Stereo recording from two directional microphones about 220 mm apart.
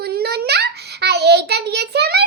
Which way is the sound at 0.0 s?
45° right (ahead or behind).